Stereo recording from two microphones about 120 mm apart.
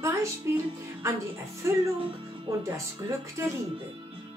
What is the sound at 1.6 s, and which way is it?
Speech, 25° right (ahead or behind).